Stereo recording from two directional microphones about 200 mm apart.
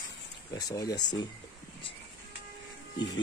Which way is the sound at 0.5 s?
15° left (ahead or behind).